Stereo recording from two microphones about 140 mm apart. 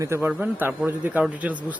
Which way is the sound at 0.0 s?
15° right (ahead or behind).